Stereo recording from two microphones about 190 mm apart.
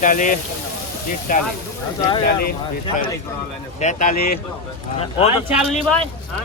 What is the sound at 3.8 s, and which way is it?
Speech, 40° left (ahead or behind).